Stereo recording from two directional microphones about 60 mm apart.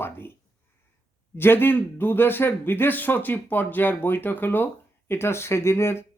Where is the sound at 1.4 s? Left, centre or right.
Left.